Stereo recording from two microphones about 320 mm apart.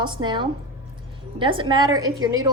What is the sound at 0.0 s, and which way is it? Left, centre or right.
A woman's voice, centre.